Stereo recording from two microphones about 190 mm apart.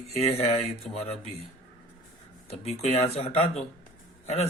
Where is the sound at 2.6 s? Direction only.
35° left (ahead or behind).